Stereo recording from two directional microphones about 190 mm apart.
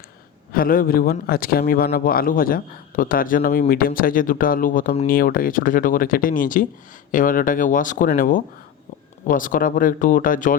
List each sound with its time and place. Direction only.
0.5 s a man's voice: 50° left (ahead or behind)